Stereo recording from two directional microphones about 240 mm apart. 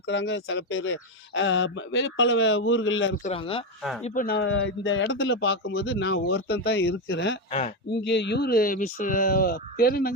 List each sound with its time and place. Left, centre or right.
0.0 s speech: left
3.2 s speech: left
4.0 s speech: left
4.4 s speech: left